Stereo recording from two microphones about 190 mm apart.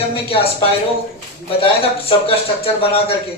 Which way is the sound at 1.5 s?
30° left (ahead or behind).